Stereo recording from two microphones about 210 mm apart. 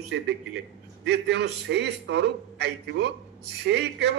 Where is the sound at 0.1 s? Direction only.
55° right (ahead or behind).